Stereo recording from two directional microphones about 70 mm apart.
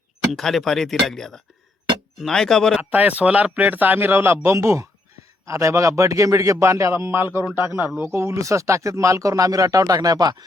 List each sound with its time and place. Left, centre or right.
0.3 s speech: centre
2.9 s speech: right
4.5 s speech: right